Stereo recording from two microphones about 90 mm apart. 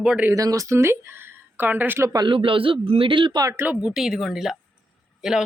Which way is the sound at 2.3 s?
75° right (ahead or behind).